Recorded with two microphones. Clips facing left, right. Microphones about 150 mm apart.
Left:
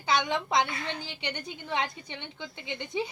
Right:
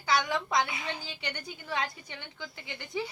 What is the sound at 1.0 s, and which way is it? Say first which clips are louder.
A woman's voice: left 3 dB; 20° left (ahead or behind).